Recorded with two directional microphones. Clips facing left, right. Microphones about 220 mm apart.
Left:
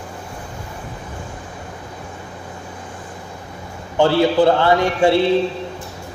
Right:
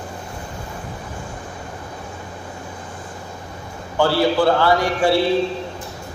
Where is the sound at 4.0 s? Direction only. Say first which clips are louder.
Left 3 dB; 20° left (ahead or behind).